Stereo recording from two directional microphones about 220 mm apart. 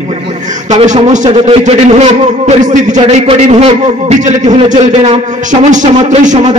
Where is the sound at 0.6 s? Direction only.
35° right (ahead or behind).